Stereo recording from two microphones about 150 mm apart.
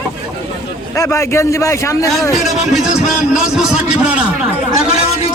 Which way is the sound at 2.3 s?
Centre (ahead or behind).